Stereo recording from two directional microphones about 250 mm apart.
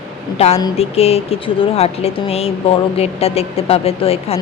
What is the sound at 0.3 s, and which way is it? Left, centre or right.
Speech, left.